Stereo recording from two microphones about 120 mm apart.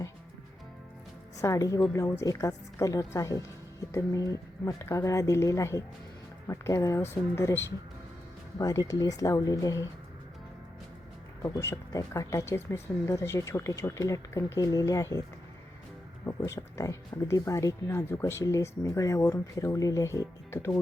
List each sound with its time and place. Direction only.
1.4 s speech: 25° left (ahead or behind)
11.4 s speech: 25° left (ahead or behind)
16.2 s speech: 20° left (ahead or behind)